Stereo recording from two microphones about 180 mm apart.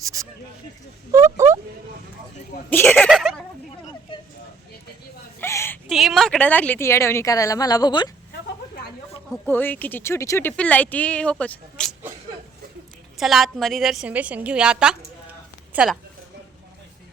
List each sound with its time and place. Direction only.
0.0 s speech: 20° right (ahead or behind)
1.1 s a sound: 15° right (ahead or behind)
2.6 s speech: 10° left (ahead or behind)
3.1 s a sound: centre (ahead or behind)
5.4 s whimper: 15° left (ahead or behind)
5.9 s speech: centre (ahead or behind); by 8.1 s 25° left (ahead or behind)
9.5 s speech: 10° left (ahead or behind)
13.1 s a woman's voice: centre (ahead or behind)